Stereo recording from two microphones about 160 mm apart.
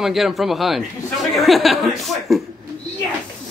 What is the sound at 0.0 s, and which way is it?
Speech, centre (ahead or behind).